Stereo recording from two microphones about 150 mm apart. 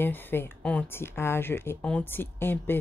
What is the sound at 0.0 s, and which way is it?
A woman's voice, 15° left (ahead or behind).